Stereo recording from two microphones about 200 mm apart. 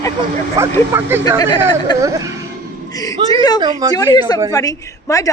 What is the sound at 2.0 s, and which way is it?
Speech, 15° right (ahead or behind).